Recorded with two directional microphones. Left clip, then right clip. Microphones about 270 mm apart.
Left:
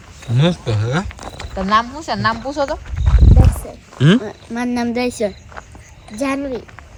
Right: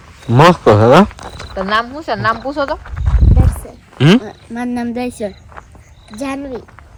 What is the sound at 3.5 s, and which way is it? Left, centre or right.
Speech, centre.